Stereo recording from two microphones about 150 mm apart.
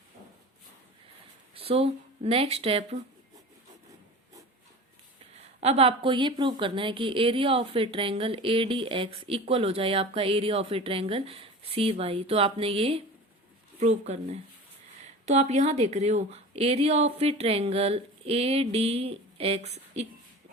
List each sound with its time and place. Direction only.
1.5 s speech: 40° right (ahead or behind)
5.5 s a woman's voice: 45° right (ahead or behind)